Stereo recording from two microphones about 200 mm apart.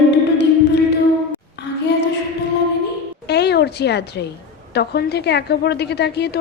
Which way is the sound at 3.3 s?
55° left (ahead or behind).